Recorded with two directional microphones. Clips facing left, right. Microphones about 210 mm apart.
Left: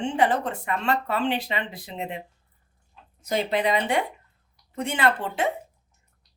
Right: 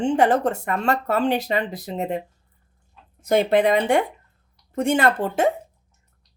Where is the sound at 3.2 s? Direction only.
55° right (ahead or behind).